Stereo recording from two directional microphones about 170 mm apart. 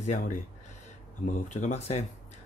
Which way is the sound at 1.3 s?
45° left (ahead or behind).